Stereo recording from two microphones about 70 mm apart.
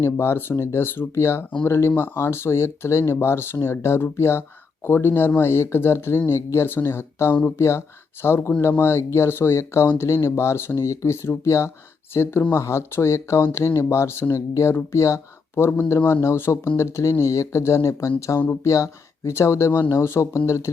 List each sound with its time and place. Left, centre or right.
0.0 s speech: left